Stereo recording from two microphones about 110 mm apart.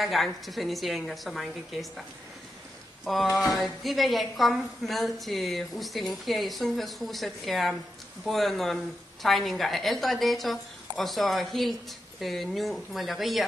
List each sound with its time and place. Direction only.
0.0 s a woman's voice: centre (ahead or behind)
3.5 s a woman's voice: centre (ahead or behind)